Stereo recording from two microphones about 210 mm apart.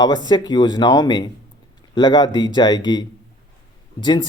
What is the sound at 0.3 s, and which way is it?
Speech, 20° left (ahead or behind).